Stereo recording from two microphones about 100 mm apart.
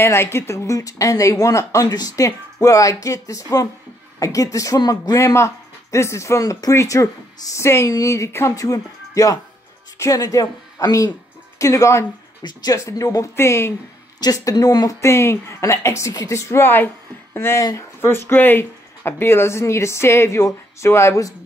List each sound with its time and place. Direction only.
0.0 s speech: 25° left (ahead or behind)
14.2 s speech: 40° left (ahead or behind)
15.0 s speech: 25° left (ahead or behind)